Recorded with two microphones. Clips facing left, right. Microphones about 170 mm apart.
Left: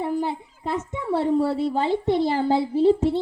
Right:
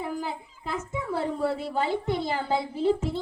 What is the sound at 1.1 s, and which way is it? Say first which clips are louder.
A woman's voice: left 7 dB; 35° left (ahead or behind).